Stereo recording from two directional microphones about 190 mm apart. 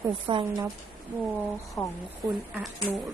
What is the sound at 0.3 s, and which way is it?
Speech, 20° right (ahead or behind).